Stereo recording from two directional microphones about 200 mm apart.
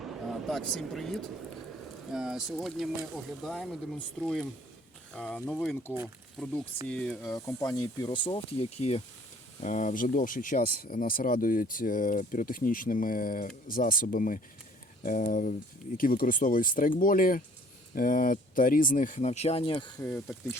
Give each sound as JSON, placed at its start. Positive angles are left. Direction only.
{"t": 0.0, "sound": "speech", "side_deg": 0}
{"t": 7.3, "sound": "speech", "side_deg": 15}
{"t": 20.1, "sound": "speech", "side_deg": 10}